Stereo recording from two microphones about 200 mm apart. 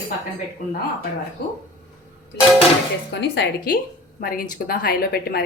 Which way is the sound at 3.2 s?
55° left (ahead or behind).